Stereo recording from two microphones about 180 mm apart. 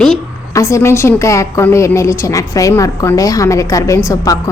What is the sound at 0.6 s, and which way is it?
A woman's voice, 15° left (ahead or behind).